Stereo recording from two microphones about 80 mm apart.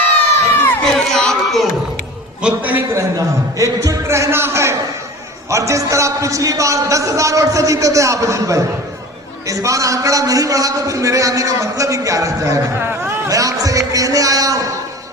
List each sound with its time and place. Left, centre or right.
0.8 s crowd: centre
2.4 s a man's voice: right
2.9 s a man's voice: right